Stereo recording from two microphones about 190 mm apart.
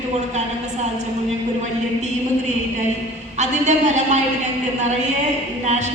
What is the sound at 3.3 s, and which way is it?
Speech, 40° right (ahead or behind).